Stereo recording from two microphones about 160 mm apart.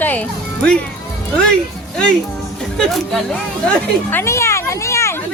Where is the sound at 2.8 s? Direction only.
Centre (ahead or behind); by 5.2 s 15° left (ahead or behind).